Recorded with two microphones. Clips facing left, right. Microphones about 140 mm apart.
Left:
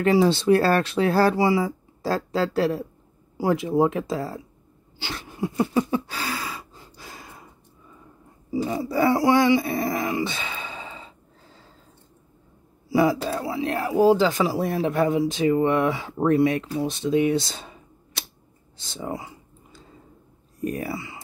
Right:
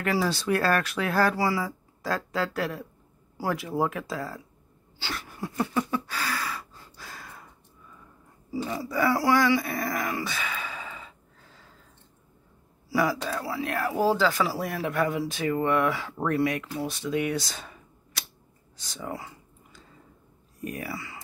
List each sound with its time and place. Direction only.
0.0 s speech: 25° left (ahead or behind)
4.9 s a sound: 20° left (ahead or behind)
8.5 s speech: 20° left (ahead or behind)
12.9 s speech: 25° left (ahead or behind)
20.6 s speech: 35° left (ahead or behind)